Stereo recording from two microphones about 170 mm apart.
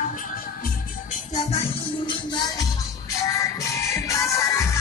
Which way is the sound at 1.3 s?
40° left (ahead or behind).